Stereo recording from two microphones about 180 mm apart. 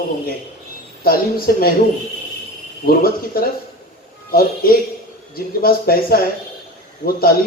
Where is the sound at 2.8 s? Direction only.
55° left (ahead or behind).